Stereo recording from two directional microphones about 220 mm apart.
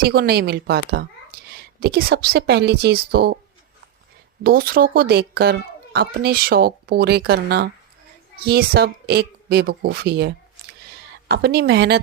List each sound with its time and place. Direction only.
0.0 s a woman's voice: 45° right (ahead or behind)
4.4 s a woman's voice: 45° right (ahead or behind)